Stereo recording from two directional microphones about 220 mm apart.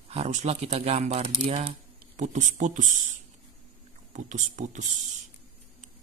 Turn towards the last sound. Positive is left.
turn(degrees=-35)  # may be behind; listen again after turning